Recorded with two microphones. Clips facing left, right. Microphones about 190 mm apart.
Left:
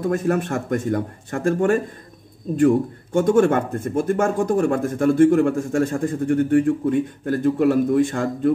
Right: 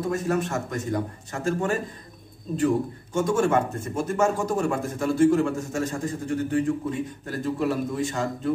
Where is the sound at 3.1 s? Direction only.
60° left (ahead or behind).